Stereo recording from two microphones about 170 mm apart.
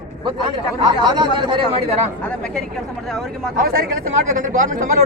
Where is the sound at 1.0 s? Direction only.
25° right (ahead or behind).